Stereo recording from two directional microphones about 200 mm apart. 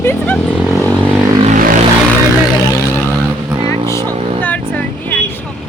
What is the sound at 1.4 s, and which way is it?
Vehicle, 40° right (ahead or behind).